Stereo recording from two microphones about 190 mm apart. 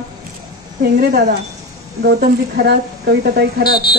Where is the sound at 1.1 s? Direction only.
60° right (ahead or behind).